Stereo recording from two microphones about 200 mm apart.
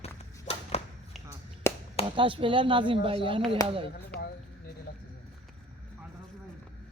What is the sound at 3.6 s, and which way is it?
Speech, 20° left (ahead or behind).